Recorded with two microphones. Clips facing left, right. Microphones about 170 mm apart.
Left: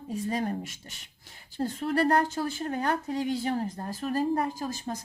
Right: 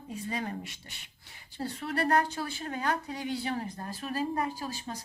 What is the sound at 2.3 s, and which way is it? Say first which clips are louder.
Speech: left 5 dB; 45° left (ahead or behind).